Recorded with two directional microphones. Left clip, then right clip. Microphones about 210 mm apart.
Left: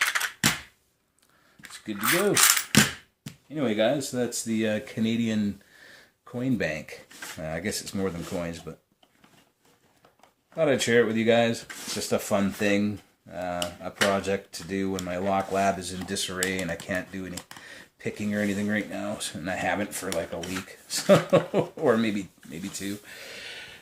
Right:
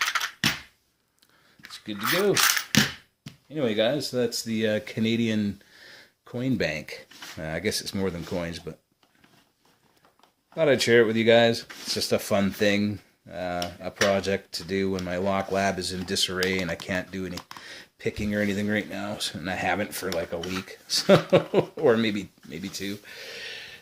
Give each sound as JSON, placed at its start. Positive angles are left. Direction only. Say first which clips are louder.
{"t": 1.6, "sound": "speech", "louder": "left 1 dB", "side_deg": 0}
{"t": 3.5, "sound": "speech", "louder": "even", "side_deg": -40}
{"t": 10.5, "sound": "speech", "louder": "right 2 dB", "side_deg": -45}